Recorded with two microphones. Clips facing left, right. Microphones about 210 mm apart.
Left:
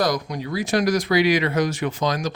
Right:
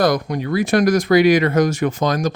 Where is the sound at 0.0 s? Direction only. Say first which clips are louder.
Right 5 dB; 55° right (ahead or behind).